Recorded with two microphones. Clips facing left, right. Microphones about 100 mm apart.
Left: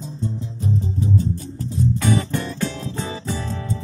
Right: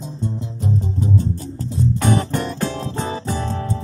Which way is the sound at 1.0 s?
40° right (ahead or behind).